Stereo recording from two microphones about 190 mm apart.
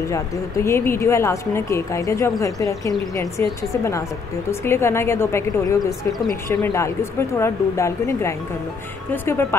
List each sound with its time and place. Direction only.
0.1 s speech: 15° left (ahead or behind)